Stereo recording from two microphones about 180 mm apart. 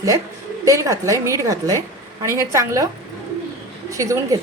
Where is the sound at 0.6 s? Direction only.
15° right (ahead or behind).